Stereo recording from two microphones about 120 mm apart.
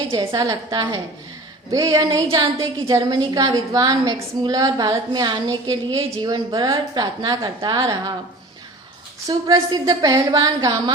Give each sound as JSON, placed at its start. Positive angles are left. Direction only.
{"t": 0.3, "sound": "a woman's voice", "side_deg": -30}
{"t": 3.0, "sound": "a woman's voice", "side_deg": -40}
{"t": 9.2, "sound": "a woman's voice", "side_deg": -35}